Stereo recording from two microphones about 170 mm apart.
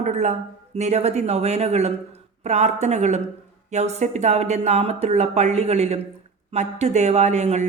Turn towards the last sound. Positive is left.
turn(degrees=-40)  # may be behind; listen again after turning